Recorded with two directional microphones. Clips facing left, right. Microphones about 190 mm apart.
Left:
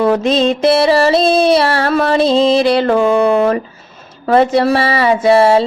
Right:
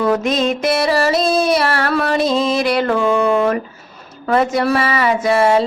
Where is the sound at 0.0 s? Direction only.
30° left (ahead or behind).